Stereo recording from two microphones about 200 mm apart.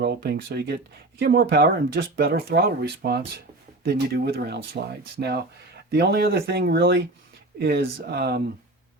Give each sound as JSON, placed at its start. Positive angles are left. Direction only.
{"t": 0.0, "sound": "speech", "side_deg": -55}